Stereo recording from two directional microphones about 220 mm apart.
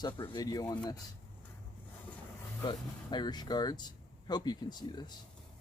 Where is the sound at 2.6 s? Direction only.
20° left (ahead or behind).